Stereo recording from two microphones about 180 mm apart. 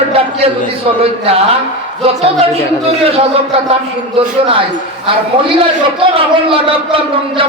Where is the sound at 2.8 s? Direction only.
35° right (ahead or behind).